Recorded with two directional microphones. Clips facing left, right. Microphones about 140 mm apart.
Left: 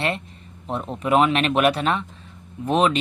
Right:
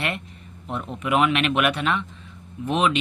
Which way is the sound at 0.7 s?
35° left (ahead or behind).